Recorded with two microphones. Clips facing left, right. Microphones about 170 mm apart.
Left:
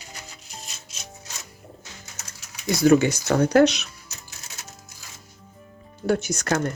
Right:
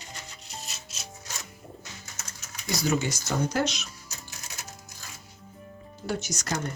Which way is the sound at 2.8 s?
55° left (ahead or behind).